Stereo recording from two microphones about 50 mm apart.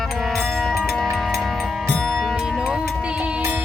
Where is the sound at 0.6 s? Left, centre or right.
Centre.